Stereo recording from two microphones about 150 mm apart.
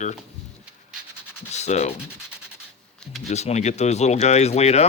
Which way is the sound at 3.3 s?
50° left (ahead or behind).